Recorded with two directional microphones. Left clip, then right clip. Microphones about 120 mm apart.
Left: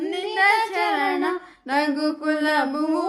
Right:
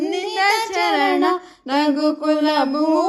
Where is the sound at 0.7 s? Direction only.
40° right (ahead or behind).